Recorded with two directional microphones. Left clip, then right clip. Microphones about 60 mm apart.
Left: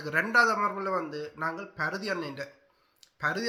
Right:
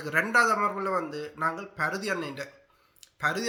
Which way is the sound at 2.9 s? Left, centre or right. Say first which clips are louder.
Right 2 dB; centre.